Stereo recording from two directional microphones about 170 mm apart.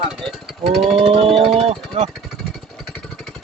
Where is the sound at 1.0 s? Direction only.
35° right (ahead or behind).